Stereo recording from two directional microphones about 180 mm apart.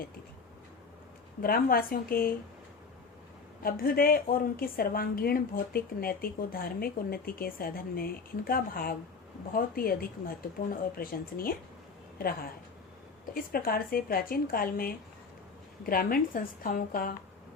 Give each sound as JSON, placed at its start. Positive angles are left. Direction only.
{"t": 1.4, "sound": "a woman's voice", "side_deg": 55}
{"t": 3.6, "sound": "a woman's voice", "side_deg": 55}
{"t": 13.3, "sound": "speech", "side_deg": 55}